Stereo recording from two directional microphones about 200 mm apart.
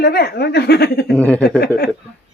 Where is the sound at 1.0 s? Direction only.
5° left (ahead or behind).